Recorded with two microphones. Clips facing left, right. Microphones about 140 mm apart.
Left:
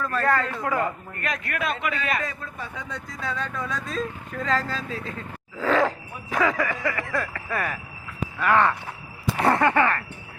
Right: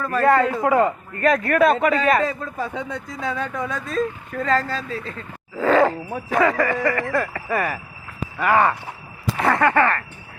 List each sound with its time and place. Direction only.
0.3 s a man's voice: 20° right (ahead or behind)
1.2 s a man's voice: 40° right (ahead or behind)
3.1 s a man's voice: 20° right (ahead or behind)
3.7 s speech: centre (ahead or behind)
5.0 s a sound: centre (ahead or behind)
6.3 s speech: centre (ahead or behind)
9.4 s a sound: 25° left (ahead or behind)